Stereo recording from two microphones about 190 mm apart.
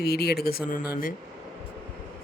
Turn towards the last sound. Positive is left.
turn(degrees=50)  # may be behind; listen again after turning